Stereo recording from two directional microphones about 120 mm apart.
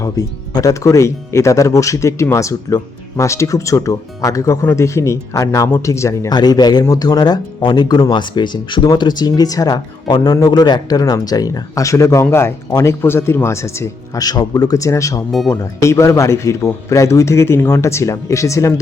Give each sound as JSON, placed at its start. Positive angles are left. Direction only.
{"t": 0.0, "sound": "speech", "side_deg": 30}